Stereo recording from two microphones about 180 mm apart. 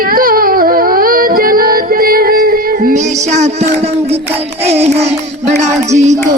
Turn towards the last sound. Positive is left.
turn(degrees=-40)  # may be behind; listen again after turning